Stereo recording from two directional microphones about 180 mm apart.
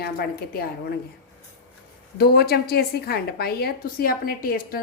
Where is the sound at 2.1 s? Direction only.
60° left (ahead or behind).